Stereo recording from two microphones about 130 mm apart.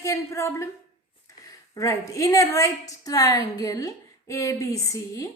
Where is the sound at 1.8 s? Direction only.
25° left (ahead or behind).